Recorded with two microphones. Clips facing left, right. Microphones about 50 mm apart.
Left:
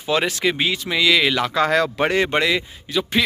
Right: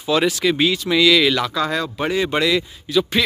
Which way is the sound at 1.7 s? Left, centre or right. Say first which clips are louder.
Left 3 dB; left.